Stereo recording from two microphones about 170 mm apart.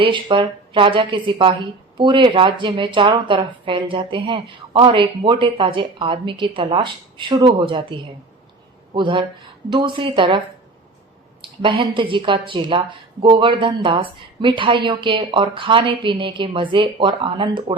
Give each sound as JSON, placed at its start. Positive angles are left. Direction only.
{"t": 0.0, "sound": "a woman's voice", "side_deg": -30}
{"t": 11.4, "sound": "a woman's voice", "side_deg": -30}